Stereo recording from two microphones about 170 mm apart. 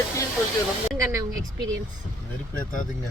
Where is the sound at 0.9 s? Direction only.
20° right (ahead or behind).